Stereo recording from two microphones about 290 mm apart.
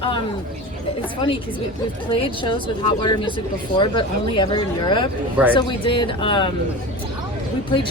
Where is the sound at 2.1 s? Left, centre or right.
Centre.